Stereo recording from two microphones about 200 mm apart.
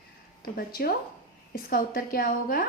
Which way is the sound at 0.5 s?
50° left (ahead or behind).